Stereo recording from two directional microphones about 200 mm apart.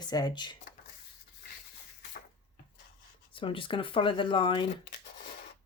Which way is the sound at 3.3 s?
25° left (ahead or behind).